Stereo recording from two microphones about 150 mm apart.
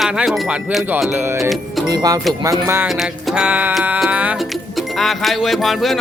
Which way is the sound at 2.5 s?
15° right (ahead or behind).